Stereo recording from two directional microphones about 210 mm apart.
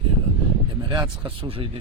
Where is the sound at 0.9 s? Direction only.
20° right (ahead or behind).